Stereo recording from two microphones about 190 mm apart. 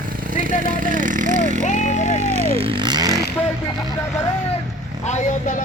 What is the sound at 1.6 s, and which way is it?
Speech, 40° left (ahead or behind).